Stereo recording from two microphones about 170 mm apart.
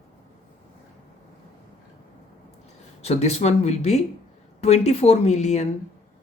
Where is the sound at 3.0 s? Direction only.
40° left (ahead or behind).